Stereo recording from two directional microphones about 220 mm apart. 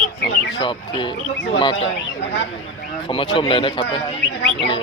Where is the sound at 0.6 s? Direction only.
20° left (ahead or behind).